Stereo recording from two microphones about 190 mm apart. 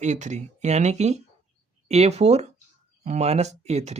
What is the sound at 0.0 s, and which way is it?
Speech, 40° right (ahead or behind).